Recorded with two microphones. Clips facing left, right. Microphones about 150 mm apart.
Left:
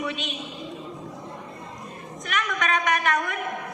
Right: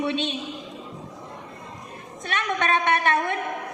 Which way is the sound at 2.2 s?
30° right (ahead or behind).